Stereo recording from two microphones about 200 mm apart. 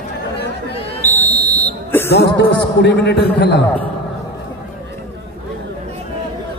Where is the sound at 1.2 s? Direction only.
10° left (ahead or behind).